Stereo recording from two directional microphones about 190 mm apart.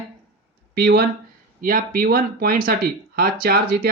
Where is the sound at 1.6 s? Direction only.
45° right (ahead or behind).